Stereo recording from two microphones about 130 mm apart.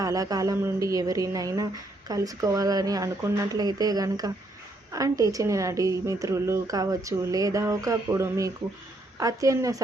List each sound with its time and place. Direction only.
0.0 s a woman's voice: 25° right (ahead or behind)